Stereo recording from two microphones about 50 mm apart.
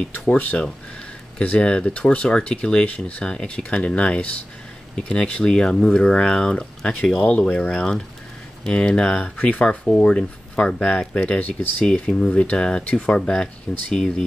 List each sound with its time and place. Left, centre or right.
0.3 s speech: left
7.2 s speech: left
7.4 s speech: left
12.1 s speech: centre
12.4 s speech: left